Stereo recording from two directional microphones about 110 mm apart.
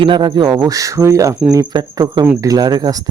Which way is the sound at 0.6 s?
30° right (ahead or behind).